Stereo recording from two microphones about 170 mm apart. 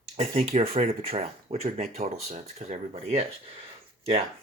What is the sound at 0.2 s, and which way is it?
Speech, 35° right (ahead or behind).